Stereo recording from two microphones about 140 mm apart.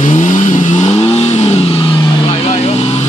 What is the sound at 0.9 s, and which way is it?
Vehicle, 45° left (ahead or behind).